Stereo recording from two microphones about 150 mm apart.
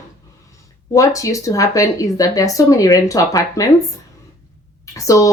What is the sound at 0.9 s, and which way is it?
Speech, 20° left (ahead or behind).